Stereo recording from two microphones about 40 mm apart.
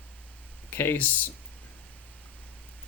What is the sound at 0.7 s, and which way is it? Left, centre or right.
Speech, left.